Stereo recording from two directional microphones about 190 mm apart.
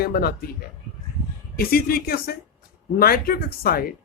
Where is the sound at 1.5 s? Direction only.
55° left (ahead or behind).